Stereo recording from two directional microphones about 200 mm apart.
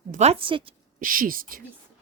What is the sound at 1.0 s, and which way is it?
Speech, 45° right (ahead or behind).